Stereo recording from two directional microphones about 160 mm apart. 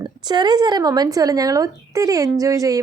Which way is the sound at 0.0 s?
25° right (ahead or behind).